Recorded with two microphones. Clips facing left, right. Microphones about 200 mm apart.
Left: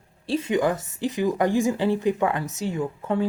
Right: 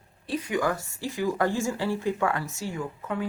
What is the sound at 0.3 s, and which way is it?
A woman's voice, 25° left (ahead or behind).